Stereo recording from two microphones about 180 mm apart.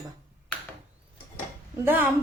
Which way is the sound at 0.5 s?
10° left (ahead or behind).